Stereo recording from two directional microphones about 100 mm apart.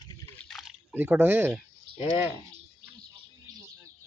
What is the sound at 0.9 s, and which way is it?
Speech, 20° right (ahead or behind).